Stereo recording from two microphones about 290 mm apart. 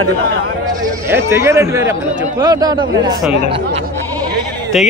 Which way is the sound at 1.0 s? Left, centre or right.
Centre.